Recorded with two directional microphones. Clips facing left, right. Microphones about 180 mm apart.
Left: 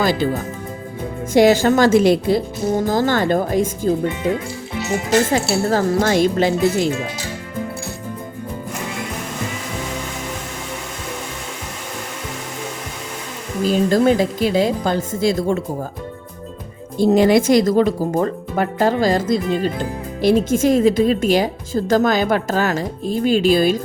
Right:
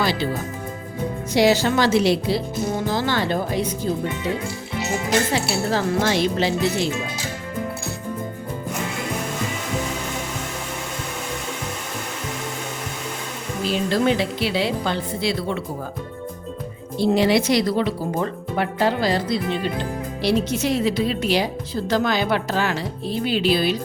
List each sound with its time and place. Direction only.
0.0 s speech: 45° left (ahead or behind)
1.3 s speech: 50° left (ahead or behind)
5.3 s speech: 45° left (ahead or behind)
13.7 s speech: 45° left (ahead or behind)
17.0 s speech: 45° left (ahead or behind)